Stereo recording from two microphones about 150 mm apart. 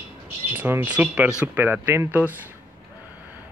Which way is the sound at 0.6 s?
15° right (ahead or behind).